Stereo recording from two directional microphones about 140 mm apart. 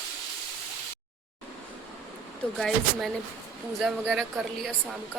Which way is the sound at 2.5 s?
Centre (ahead or behind).